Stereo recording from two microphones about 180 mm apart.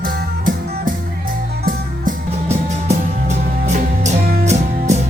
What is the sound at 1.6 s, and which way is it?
Music, 45° right (ahead or behind).